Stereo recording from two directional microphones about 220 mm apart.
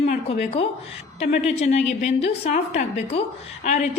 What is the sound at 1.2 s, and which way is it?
A woman's voice, 30° left (ahead or behind).